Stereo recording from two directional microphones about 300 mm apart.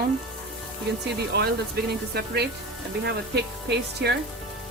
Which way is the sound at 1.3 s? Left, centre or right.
Right.